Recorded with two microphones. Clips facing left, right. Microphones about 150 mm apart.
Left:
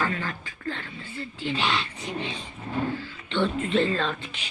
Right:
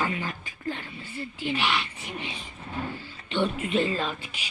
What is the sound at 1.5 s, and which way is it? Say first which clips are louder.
Speech: left 1 dB; 25° left (ahead or behind).